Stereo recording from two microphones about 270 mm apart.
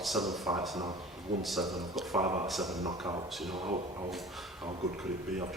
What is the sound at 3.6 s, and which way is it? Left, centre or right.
Speech, right.